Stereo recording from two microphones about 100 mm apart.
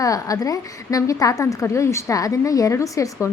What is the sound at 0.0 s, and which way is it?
Speech, 35° left (ahead or behind).